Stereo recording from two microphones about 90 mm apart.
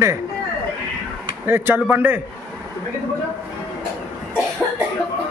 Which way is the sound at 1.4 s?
25° right (ahead or behind).